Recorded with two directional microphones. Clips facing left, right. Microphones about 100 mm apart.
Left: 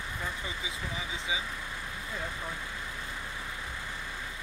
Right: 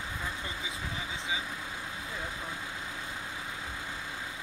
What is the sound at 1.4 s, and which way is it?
Vehicle, 15° right (ahead or behind).